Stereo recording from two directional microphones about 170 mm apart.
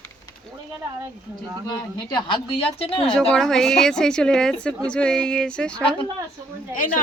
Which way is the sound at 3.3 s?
Centre (ahead or behind).